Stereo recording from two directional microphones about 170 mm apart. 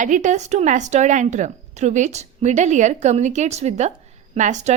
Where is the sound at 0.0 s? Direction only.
45° right (ahead or behind).